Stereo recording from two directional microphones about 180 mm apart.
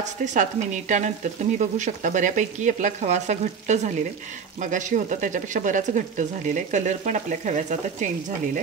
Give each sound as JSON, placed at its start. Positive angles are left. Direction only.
{"t": 0.0, "sound": "speech", "side_deg": -45}